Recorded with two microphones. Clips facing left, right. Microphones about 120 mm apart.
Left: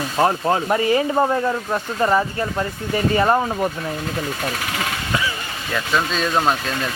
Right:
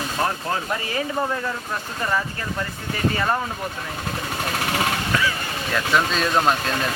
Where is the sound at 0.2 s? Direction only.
30° left (ahead or behind).